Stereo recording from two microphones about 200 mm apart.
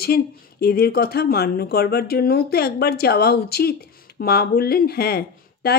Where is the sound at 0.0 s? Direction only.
50° left (ahead or behind).